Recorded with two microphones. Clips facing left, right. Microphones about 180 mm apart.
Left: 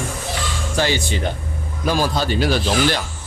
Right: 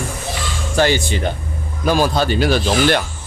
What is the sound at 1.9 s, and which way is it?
Speech, 60° right (ahead or behind).